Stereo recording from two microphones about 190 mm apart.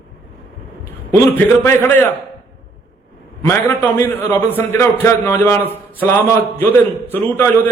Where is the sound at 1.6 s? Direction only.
10° left (ahead or behind).